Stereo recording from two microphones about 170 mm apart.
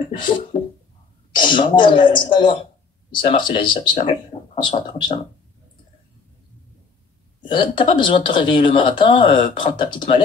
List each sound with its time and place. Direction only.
0.2 s a sound: 30° left (ahead or behind)
1.3 s speech: 30° left (ahead or behind)
7.4 s speech: 30° left (ahead or behind)